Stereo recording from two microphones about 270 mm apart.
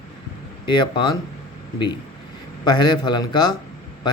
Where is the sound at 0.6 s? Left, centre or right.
Centre.